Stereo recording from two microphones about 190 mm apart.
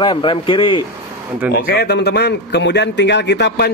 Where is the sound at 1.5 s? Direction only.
55° left (ahead or behind).